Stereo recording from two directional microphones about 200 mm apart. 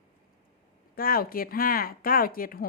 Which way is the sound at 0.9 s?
45° left (ahead or behind).